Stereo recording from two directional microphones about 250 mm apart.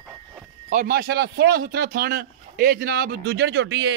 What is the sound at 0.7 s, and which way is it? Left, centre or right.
A man's voice, right.